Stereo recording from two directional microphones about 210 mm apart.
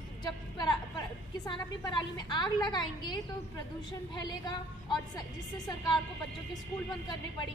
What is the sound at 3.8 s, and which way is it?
A woman's voice, 20° left (ahead or behind).